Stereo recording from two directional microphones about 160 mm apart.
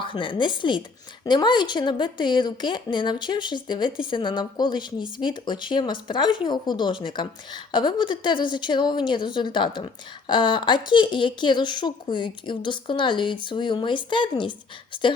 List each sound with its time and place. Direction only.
0.0 s speech: 30° left (ahead or behind)